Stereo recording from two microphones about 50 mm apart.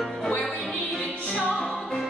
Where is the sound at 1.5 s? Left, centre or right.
Centre.